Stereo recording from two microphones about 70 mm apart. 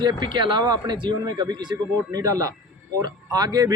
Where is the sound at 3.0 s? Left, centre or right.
Right.